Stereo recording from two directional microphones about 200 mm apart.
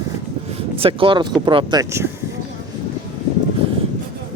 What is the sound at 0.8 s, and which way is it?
Speech, 25° right (ahead or behind).